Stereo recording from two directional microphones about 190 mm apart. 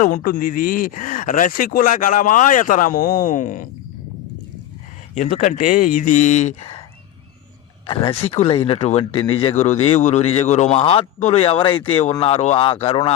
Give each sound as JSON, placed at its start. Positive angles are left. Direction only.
{"t": 0.0, "sound": "speech", "side_deg": 40}
{"t": 5.1, "sound": "speech", "side_deg": 40}
{"t": 7.9, "sound": "a man's voice", "side_deg": 30}